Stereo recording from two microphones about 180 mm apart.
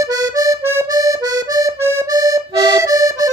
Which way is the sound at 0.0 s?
20° right (ahead or behind).